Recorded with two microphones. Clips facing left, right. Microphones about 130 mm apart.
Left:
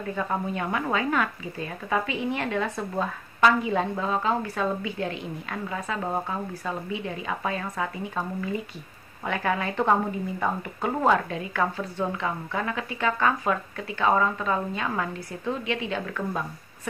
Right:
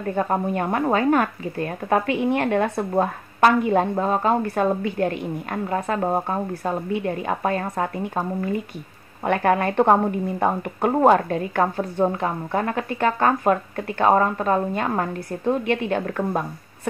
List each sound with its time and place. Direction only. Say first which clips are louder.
0.1 s speech: right 6 dB; 45° right (ahead or behind)